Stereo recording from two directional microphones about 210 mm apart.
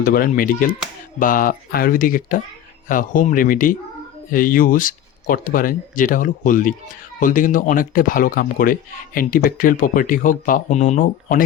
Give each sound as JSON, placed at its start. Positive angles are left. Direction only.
{"t": 0.0, "sound": "speech", "side_deg": 45}